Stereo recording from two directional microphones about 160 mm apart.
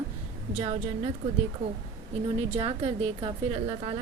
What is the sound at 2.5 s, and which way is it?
A woman's voice, 40° right (ahead or behind).